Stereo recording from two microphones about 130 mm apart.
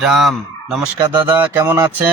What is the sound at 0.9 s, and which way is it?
Speech, 35° right (ahead or behind).